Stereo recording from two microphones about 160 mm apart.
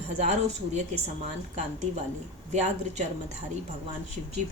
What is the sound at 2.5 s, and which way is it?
Speech, 45° right (ahead or behind).